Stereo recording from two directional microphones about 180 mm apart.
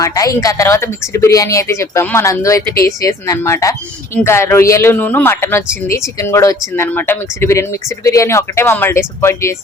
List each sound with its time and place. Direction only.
0.0 s speech: 20° left (ahead or behind)